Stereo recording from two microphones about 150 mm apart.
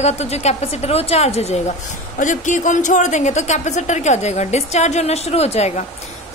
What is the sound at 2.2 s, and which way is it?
A woman's voice, 55° left (ahead or behind).